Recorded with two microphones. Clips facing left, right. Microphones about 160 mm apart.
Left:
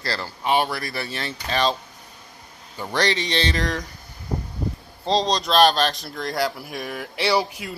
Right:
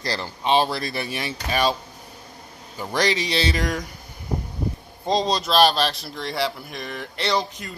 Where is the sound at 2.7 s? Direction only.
10° right (ahead or behind).